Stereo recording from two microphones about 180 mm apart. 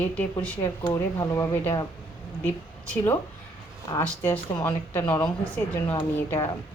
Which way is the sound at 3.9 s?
10° left (ahead or behind).